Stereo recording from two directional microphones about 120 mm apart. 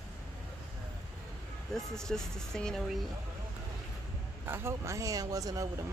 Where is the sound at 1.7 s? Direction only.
5° left (ahead or behind).